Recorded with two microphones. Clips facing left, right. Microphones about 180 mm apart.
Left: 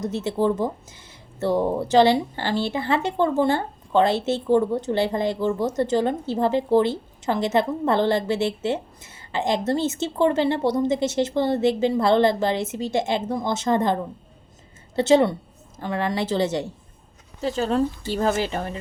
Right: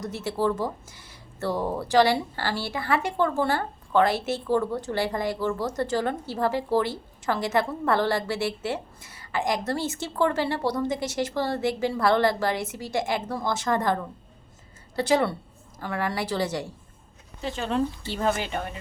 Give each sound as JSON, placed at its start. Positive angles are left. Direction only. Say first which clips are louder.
{"t": 0.0, "sound": "speech", "louder": "left 4 dB", "side_deg": 20}
{"t": 17.4, "sound": "a woman's voice", "louder": "left 5 dB", "side_deg": 40}